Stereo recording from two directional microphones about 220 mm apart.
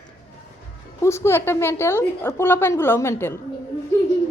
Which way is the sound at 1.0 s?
10° left (ahead or behind).